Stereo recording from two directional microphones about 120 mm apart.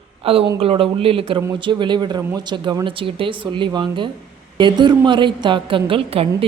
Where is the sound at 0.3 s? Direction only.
50° right (ahead or behind).